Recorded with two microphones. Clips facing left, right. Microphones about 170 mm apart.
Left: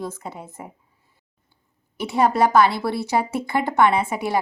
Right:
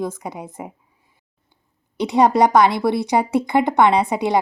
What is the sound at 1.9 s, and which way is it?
Speech, 20° right (ahead or behind).